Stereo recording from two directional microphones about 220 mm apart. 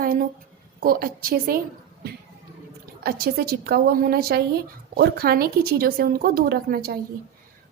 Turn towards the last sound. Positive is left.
turn(degrees=-45)  # may be behind; listen again after turning